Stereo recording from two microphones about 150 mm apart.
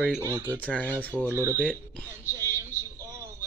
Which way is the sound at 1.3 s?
20° right (ahead or behind).